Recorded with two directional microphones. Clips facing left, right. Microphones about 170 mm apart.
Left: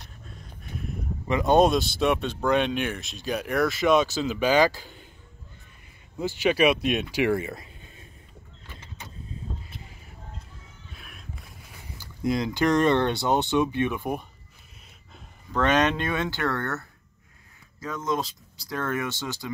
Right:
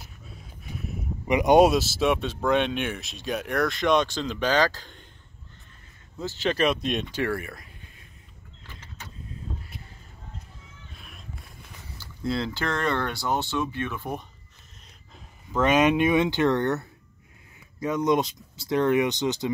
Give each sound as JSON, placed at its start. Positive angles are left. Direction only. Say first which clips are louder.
{"t": 0.0, "sound": "a sound", "louder": "even", "side_deg": -5}
{"t": 1.2, "sound": "speech", "louder": "right 2 dB", "side_deg": -15}
{"t": 1.7, "sound": "speech", "louder": "even", "side_deg": -5}
{"t": 6.1, "sound": "speech", "louder": "left 3 dB", "side_deg": 10}
{"t": 10.9, "sound": "music", "louder": "left 2 dB", "side_deg": 0}
{"t": 12.0, "sound": "speech", "louder": "left 2 dB", "side_deg": 15}
{"t": 15.1, "sound": "speech", "louder": "right 1 dB", "side_deg": -5}